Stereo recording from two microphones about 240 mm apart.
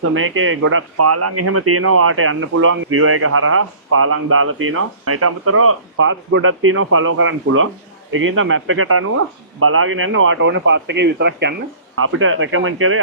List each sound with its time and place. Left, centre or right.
0.1 s speech: right
11.9 s speech: right